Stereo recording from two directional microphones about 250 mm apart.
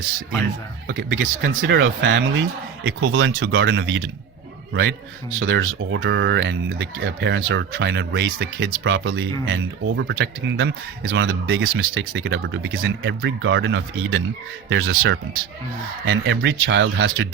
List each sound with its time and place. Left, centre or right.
0.9 s a man's voice: right